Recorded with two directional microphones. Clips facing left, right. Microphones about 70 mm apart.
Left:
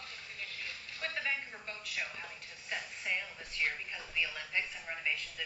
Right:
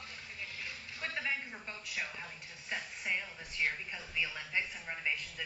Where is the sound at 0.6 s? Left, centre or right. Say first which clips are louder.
Left 1 dB; centre.